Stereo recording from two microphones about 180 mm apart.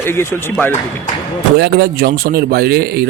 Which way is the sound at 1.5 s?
65° right (ahead or behind).